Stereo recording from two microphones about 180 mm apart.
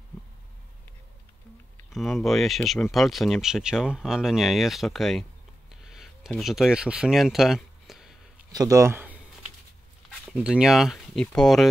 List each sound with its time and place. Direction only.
1.9 s speech: centre (ahead or behind)
8.5 s speech: 20° right (ahead or behind)
10.3 s speech: 5° right (ahead or behind)